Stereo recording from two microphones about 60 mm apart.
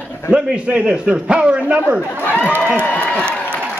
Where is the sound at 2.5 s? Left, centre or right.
Right.